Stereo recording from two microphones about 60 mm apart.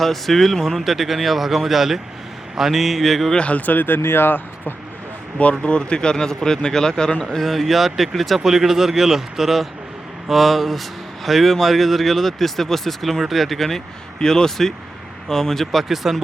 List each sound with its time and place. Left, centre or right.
0.0 s speech: centre
3.3 s speech: left
5.4 s speech: centre